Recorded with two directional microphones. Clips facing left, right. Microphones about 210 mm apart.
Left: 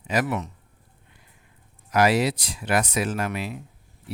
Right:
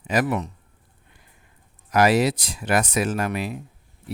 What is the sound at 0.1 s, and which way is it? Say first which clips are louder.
Speech: right 2 dB; 40° right (ahead or behind).